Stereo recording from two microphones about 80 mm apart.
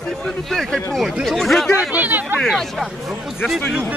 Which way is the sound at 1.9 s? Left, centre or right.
Centre.